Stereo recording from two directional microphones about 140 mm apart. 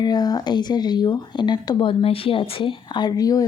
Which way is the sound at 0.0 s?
30° left (ahead or behind).